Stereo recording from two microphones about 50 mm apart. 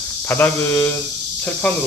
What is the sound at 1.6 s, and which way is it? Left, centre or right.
Speech, left.